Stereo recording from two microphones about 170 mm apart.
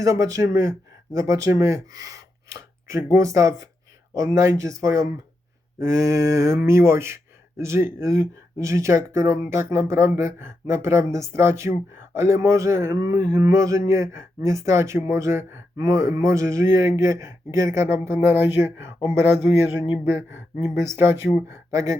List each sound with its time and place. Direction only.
0.0 s speech: 20° right (ahead or behind)